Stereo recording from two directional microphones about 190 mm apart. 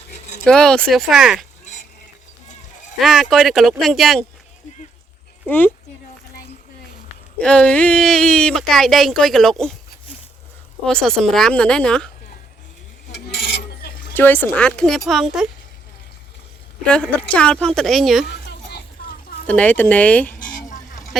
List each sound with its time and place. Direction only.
0.4 s speech: 5° left (ahead or behind)
3.0 s speech: centre (ahead or behind)
5.5 s speech: 10° left (ahead or behind)
7.3 s speech: 5° left (ahead or behind)
10.8 s speech: 5° left (ahead or behind)
13.1 s a sound: 60° left (ahead or behind)
14.1 s speech: 10° left (ahead or behind)
16.8 s speech: 5° left (ahead or behind)
18.3 s a sound: 60° left (ahead or behind)
19.5 s speech: 5° left (ahead or behind)
20.6 s a sound: 40° left (ahead or behind)